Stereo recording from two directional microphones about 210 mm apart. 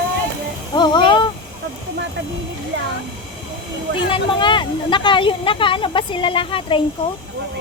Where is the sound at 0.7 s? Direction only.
20° left (ahead or behind).